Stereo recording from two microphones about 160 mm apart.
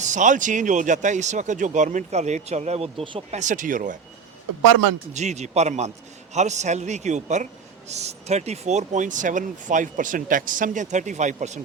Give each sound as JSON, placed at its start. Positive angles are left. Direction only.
{"t": 0.0, "sound": "speech", "side_deg": -50}
{"t": 3.3, "sound": "speech", "side_deg": -50}
{"t": 5.1, "sound": "speech", "side_deg": -45}